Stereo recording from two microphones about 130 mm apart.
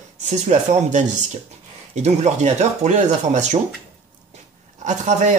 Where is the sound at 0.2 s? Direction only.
65° right (ahead or behind).